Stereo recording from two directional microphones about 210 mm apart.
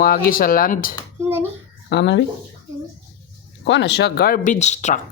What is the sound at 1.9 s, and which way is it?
Speech, 55° left (ahead or behind).